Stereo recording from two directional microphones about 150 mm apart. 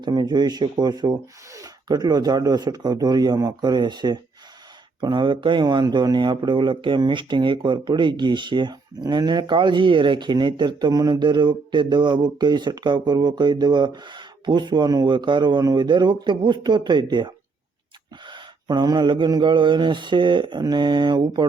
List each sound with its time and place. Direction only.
0.0 s speech: 30° right (ahead or behind)